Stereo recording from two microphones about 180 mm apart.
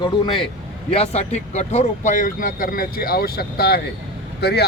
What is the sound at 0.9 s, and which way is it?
Speech, 35° left (ahead or behind).